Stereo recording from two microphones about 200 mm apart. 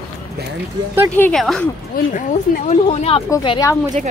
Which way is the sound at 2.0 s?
45° left (ahead or behind).